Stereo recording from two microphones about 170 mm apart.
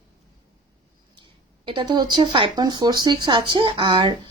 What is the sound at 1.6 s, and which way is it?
Speech, 30° right (ahead or behind).